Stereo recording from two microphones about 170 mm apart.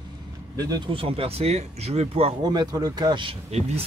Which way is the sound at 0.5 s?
25° right (ahead or behind).